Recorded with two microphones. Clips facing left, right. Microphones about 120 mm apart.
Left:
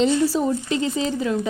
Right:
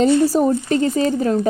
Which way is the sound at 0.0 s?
50° right (ahead or behind).